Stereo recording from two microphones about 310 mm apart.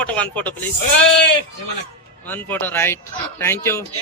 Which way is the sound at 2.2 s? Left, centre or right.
Centre.